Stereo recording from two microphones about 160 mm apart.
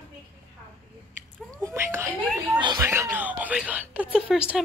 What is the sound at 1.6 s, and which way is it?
Whispering, 20° right (ahead or behind).